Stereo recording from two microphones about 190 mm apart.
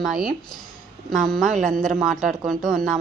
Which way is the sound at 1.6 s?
45° right (ahead or behind).